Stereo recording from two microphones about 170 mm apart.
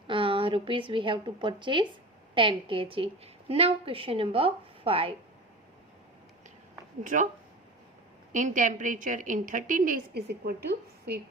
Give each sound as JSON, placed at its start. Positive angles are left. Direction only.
{"t": 0.1, "sound": "a woman's voice", "side_deg": -30}
{"t": 7.0, "sound": "a woman's voice", "side_deg": -50}
{"t": 8.3, "sound": "a woman's voice", "side_deg": -50}